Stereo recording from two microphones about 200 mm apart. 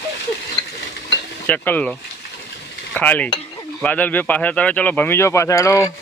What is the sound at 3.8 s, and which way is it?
Speech, 10° left (ahead or behind).